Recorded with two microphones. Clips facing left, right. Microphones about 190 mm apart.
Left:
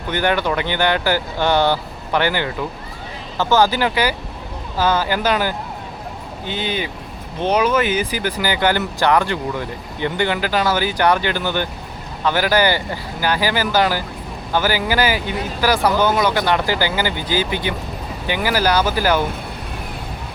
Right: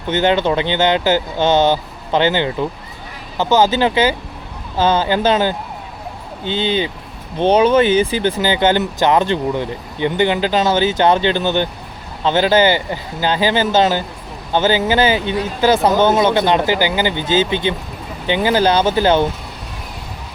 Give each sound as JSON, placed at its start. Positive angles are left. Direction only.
{"t": 0.1, "sound": "speech", "side_deg": -20}